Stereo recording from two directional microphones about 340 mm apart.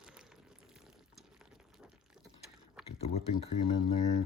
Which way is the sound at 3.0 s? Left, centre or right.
Centre.